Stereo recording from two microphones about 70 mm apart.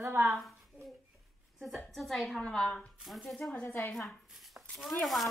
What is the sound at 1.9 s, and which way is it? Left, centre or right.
Speech, centre.